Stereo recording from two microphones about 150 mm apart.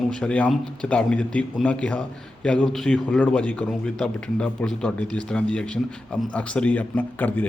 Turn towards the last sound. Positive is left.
turn(degrees=10)  # may be behind; listen again after turning